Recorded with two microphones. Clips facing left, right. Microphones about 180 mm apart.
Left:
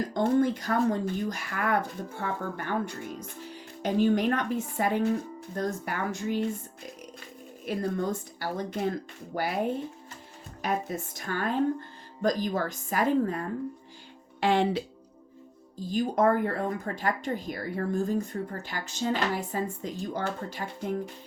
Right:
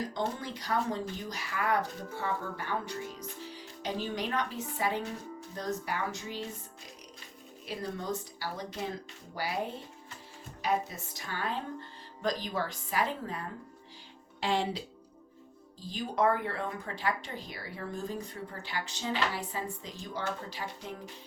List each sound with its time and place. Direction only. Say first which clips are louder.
0.1 s speech: left 11 dB; 50° left (ahead or behind)
7.6 s speech: left 8 dB; 50° left (ahead or behind)
10.6 s speech: left 2 dB; 50° left (ahead or behind)
14.4 s speech: left 6 dB; 60° left (ahead or behind)
15.8 s speech: left 5 dB; 45° left (ahead or behind)